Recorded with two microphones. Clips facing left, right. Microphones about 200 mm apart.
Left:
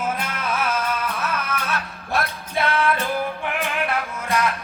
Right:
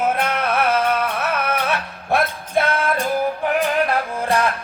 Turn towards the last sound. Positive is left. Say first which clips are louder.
# right 4 dB
turn(degrees=-30)  # may be behind; listen again after turning